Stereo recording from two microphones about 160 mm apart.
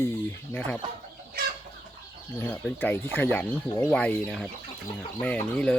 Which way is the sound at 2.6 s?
10° left (ahead or behind).